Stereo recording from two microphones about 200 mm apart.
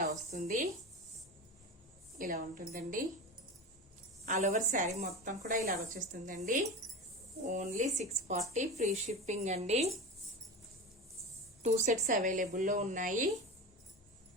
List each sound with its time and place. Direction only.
0.0 s a sound: 35° right (ahead or behind)
2.1 s a woman's voice: 45° right (ahead or behind)
4.3 s speech: 35° right (ahead or behind)
11.6 s speech: 40° right (ahead or behind)